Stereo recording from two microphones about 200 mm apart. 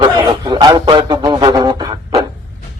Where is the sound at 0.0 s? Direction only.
20° right (ahead or behind).